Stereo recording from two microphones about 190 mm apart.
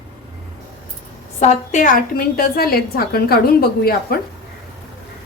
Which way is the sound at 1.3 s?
40° left (ahead or behind).